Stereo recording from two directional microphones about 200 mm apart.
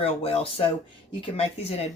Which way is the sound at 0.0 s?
30° left (ahead or behind).